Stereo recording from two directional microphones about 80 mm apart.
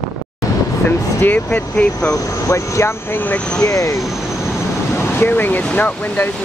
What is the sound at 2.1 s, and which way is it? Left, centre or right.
Speech, left.